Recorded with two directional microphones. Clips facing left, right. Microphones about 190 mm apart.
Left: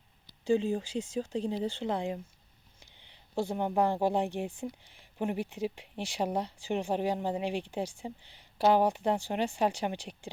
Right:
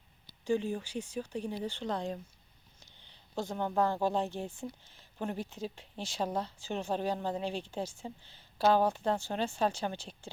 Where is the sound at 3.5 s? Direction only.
15° left (ahead or behind).